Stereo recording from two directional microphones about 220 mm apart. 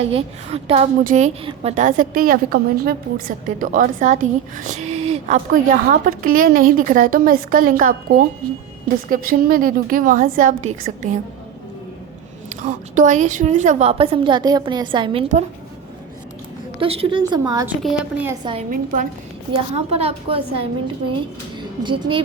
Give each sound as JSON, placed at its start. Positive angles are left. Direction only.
{"t": 0.0, "sound": "a woman's voice", "side_deg": -25}
{"t": 12.5, "sound": "a woman's voice", "side_deg": -35}
{"t": 16.8, "sound": "a woman's voice", "side_deg": -25}
{"t": 18.7, "sound": "a woman's voice", "side_deg": -40}
{"t": 19.7, "sound": "a woman's voice", "side_deg": -30}
{"t": 21.8, "sound": "a woman's voice", "side_deg": -20}